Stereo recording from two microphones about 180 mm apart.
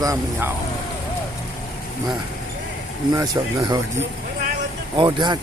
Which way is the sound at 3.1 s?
20° right (ahead or behind).